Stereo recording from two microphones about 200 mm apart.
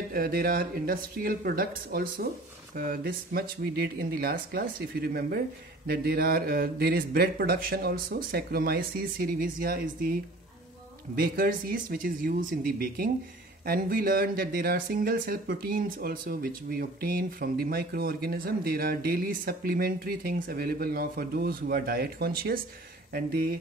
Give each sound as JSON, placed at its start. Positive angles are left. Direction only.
{"t": 0.1, "sound": "speech", "side_deg": -50}
{"t": 11.1, "sound": "speech", "side_deg": -45}